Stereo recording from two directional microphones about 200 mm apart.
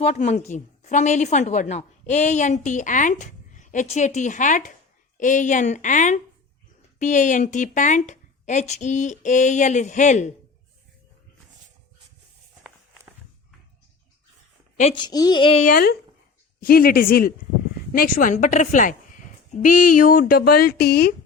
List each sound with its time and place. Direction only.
0.5 s a woman's voice: 35° left (ahead or behind)
14.8 s speech: 25° left (ahead or behind)
15.6 s a woman's voice: 50° left (ahead or behind)